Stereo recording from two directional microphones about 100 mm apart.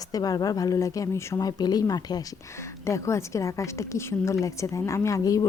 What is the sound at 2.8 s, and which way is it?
A woman's voice, 30° left (ahead or behind).